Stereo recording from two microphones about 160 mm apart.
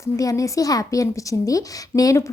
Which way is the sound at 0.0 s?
20° left (ahead or behind).